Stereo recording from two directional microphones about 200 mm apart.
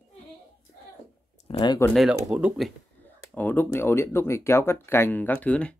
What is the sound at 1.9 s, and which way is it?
Speech, centre (ahead or behind).